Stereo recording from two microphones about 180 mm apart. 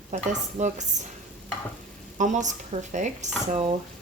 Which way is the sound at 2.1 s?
40° right (ahead or behind).